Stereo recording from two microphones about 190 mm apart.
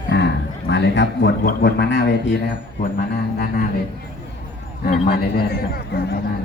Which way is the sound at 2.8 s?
50° left (ahead or behind).